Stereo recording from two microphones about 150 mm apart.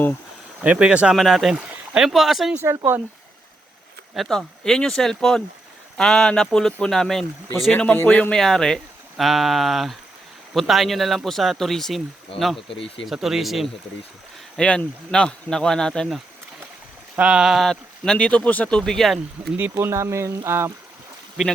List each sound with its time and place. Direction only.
0.6 s speech: 10° right (ahead or behind)
2.6 s speech: 20° right (ahead or behind)
4.1 s speech: centre (ahead or behind)
12.3 s speech: 35° left (ahead or behind)
13.1 s speech: centre (ahead or behind)
19.5 s speech: 15° right (ahead or behind)